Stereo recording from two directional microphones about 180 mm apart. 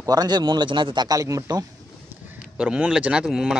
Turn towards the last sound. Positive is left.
turn(degrees=-5)  # may be behind; listen again after turning